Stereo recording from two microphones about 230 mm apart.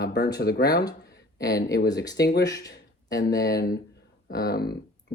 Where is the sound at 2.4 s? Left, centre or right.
Centre.